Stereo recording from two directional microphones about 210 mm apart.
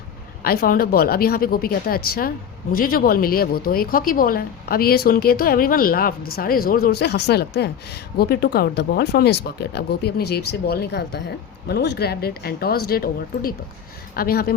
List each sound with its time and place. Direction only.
0.4 s speech: 45° left (ahead or behind)